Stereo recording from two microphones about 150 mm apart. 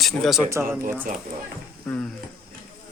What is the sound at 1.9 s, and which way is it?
Speech, 10° left (ahead or behind).